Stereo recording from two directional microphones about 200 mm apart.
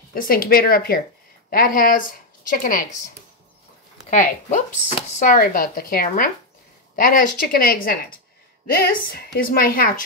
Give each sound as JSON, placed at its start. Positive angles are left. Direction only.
{"t": 0.1, "sound": "speech", "side_deg": 45}
{"t": 4.1, "sound": "speech", "side_deg": 40}